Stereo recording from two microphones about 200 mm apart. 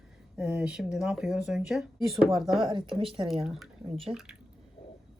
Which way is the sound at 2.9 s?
25° right (ahead or behind).